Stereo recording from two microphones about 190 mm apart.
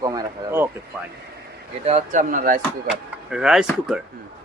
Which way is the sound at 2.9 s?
5° right (ahead or behind).